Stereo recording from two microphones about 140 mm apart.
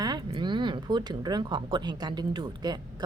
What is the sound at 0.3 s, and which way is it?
A woman's voice, 35° right (ahead or behind).